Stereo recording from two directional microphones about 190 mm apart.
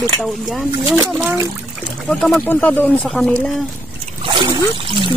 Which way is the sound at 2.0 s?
5° left (ahead or behind).